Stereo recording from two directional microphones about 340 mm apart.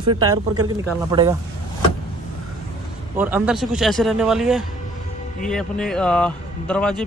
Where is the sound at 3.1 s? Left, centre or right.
Centre.